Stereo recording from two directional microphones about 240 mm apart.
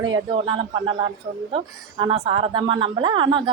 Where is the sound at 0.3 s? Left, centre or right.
Centre.